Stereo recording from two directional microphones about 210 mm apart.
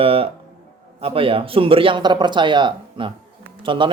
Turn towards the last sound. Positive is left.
turn(degrees=-25)  # may be behind; listen again after turning